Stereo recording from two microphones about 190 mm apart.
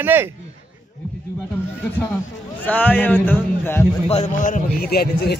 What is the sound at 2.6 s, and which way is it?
Speech, 10° left (ahead or behind).